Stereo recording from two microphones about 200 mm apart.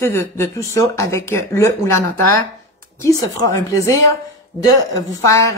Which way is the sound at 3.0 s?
15° left (ahead or behind).